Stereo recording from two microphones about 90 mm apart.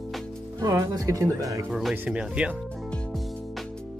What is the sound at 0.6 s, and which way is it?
Speech, 40° right (ahead or behind).